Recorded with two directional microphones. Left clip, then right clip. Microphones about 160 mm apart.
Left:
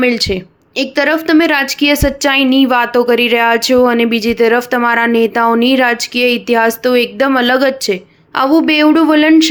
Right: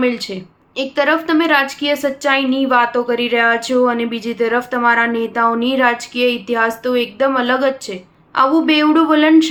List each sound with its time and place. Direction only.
0.0 s a woman's voice: 40° left (ahead or behind)